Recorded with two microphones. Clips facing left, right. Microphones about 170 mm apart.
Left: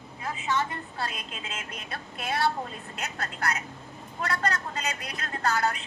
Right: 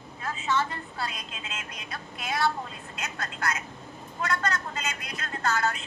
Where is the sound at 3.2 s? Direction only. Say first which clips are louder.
Even; 35° left (ahead or behind).